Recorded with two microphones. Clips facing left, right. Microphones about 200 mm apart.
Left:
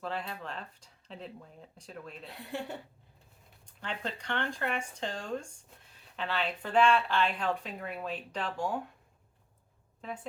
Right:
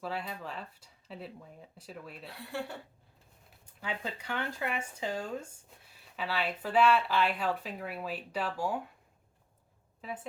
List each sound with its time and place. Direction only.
0.0 s speech: 5° right (ahead or behind)
2.5 s speech: 20° left (ahead or behind)
3.7 s speech: 5° right (ahead or behind)
10.0 s a woman's voice: 5° right (ahead or behind)